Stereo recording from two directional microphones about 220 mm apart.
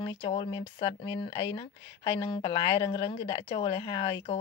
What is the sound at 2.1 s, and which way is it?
Speech, 25° left (ahead or behind).